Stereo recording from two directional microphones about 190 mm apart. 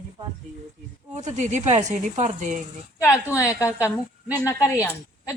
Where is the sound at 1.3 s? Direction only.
40° right (ahead or behind).